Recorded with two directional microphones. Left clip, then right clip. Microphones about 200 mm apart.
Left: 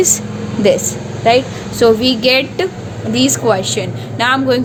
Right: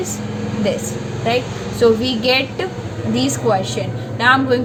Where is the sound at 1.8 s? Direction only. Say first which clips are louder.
Left 4 dB; 50° left (ahead or behind).